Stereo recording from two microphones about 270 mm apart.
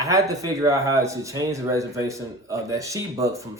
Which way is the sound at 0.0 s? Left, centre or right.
Centre.